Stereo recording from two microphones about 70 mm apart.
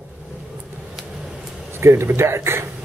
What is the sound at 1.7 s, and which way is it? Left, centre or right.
Speech, right.